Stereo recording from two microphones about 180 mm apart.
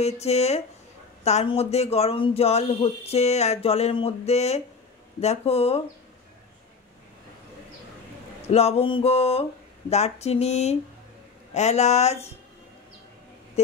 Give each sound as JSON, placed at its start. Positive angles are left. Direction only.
{"t": 0.0, "sound": "speech", "side_deg": 35}
{"t": 8.5, "sound": "speech", "side_deg": 35}